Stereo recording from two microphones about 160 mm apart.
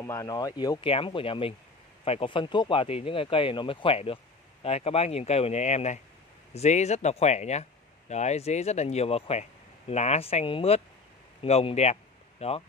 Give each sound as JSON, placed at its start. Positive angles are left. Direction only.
{"t": 0.0, "sound": "speech", "side_deg": 20}